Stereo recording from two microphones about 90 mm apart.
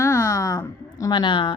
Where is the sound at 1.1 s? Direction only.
60° left (ahead or behind).